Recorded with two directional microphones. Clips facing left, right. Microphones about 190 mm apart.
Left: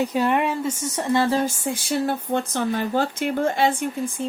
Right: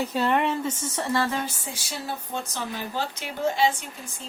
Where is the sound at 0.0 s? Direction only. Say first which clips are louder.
Left 3 dB; 15° left (ahead or behind).